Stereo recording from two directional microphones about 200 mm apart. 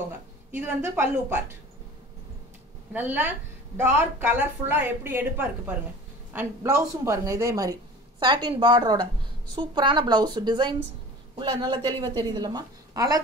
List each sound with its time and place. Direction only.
0.6 s a woman's voice: 10° right (ahead or behind)
2.9 s a woman's voice: 10° right (ahead or behind)